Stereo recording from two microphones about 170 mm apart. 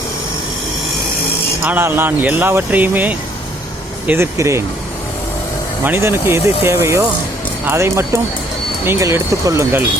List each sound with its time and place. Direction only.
1.6 s speech: 10° right (ahead or behind)
5.8 s speech: 10° right (ahead or behind)